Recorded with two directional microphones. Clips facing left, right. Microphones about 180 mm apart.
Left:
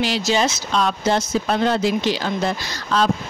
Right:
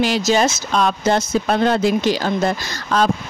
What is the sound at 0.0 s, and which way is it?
Speech, 50° right (ahead or behind).